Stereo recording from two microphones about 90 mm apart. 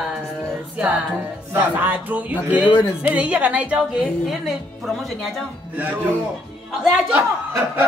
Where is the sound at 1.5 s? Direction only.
20° right (ahead or behind).